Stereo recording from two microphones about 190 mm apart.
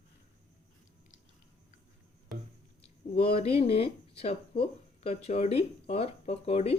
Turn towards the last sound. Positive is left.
turn(degrees=35)  # may be behind; listen again after turning